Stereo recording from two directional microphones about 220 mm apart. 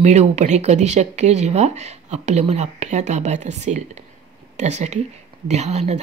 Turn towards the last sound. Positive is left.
turn(degrees=-30)  # may be behind; listen again after turning